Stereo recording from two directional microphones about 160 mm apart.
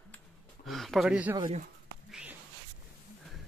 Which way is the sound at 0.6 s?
Centre (ahead or behind).